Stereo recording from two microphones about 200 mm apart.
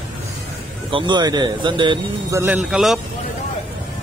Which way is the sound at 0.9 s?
20° right (ahead or behind).